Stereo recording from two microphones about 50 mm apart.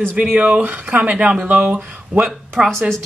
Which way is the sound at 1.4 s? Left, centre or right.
Right.